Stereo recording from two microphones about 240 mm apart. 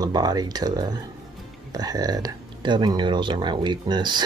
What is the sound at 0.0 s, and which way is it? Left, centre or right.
Speech, centre.